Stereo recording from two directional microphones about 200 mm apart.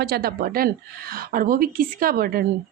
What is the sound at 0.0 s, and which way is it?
A woman's voice, 50° right (ahead or behind).